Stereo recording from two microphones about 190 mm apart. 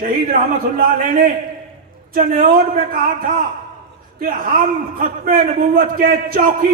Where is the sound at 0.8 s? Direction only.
50° right (ahead or behind).